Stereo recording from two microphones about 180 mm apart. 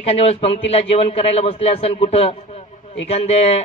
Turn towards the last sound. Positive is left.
turn(degrees=35)  # may be behind; listen again after turning